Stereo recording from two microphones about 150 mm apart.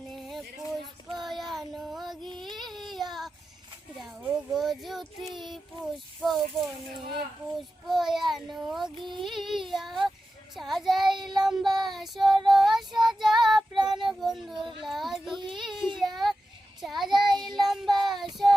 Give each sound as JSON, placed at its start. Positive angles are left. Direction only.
{"t": 1.0, "sound": "child singing", "side_deg": 0}
{"t": 4.2, "sound": "a child's voice", "side_deg": 0}
{"t": 5.3, "sound": "child singing", "side_deg": 0}
{"t": 14.6, "sound": "speech", "side_deg": -35}
{"t": 14.8, "sound": "child singing", "side_deg": 0}